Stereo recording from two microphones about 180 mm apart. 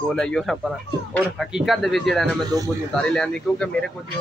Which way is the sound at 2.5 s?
20° right (ahead or behind).